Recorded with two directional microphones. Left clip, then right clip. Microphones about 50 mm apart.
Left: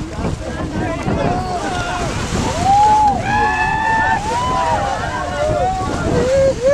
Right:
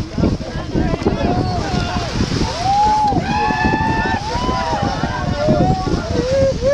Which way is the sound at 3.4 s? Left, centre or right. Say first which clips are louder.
Left 1 dB; centre.